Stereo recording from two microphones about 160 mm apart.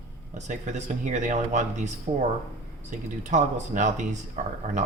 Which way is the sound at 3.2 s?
50° right (ahead or behind).